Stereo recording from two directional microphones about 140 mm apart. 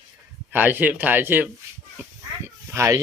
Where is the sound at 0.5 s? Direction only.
15° right (ahead or behind).